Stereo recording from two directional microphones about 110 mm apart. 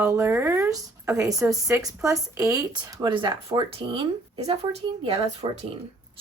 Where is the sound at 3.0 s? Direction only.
50° right (ahead or behind).